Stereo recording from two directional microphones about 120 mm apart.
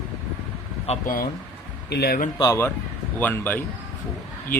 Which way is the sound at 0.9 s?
60° left (ahead or behind).